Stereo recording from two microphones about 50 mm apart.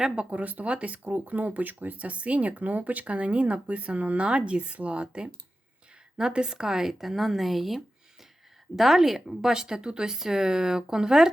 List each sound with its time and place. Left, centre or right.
0.3 s speech: right; by 11.3 s centre